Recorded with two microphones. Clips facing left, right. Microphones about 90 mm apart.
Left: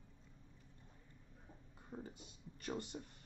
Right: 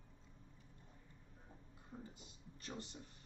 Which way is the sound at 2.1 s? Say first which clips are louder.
Left 2 dB; 55° left (ahead or behind).